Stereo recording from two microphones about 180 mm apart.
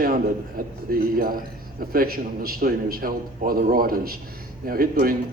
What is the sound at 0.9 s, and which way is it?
A man's voice, 55° right (ahead or behind).